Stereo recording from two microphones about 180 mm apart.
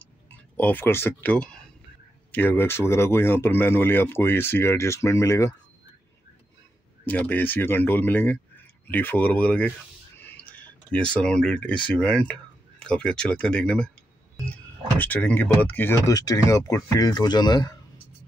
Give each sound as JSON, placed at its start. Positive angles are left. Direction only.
{"t": 0.6, "sound": "speech", "side_deg": 10}
{"t": 7.1, "sound": "speech", "side_deg": 10}
{"t": 15.0, "sound": "speech", "side_deg": 10}